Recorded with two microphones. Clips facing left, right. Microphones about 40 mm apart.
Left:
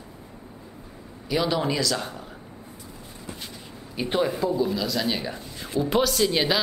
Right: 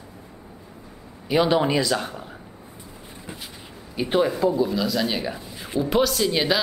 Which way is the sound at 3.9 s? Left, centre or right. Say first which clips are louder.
Right 3 dB; centre.